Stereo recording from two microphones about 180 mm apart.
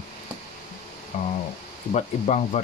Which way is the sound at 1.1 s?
35° left (ahead or behind).